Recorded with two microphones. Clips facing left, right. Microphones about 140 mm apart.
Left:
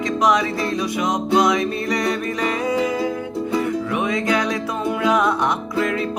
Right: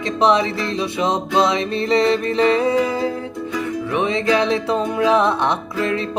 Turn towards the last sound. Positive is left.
turn(degrees=-25)  # may be behind; listen again after turning